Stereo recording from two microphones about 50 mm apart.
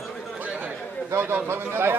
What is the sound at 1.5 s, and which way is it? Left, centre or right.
Speech, right.